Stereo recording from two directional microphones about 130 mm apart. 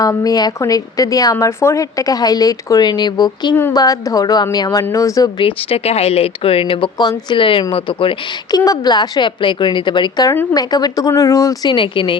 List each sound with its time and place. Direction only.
0.0 s speech: 30° left (ahead or behind)
5.4 s a woman's voice: 45° left (ahead or behind)
8.5 s a woman's voice: 30° left (ahead or behind)
10.2 s speech: 25° left (ahead or behind)
11.7 s a woman's voice: 40° left (ahead or behind)